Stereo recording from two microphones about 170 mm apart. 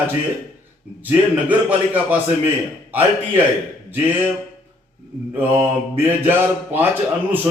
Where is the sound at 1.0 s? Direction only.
10° right (ahead or behind).